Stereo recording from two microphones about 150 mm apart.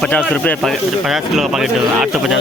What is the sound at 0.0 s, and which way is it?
Speech, 5° left (ahead or behind).